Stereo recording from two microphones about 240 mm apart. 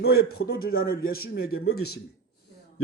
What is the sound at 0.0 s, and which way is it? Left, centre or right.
Speech, left.